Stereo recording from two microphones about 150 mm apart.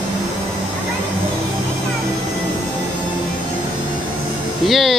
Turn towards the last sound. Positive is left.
turn(degrees=0)  # may be behind; listen again after turning